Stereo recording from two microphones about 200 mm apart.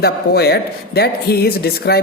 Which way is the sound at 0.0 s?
55° left (ahead or behind).